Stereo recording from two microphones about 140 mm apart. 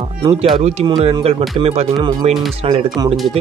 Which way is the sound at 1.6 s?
45° right (ahead or behind).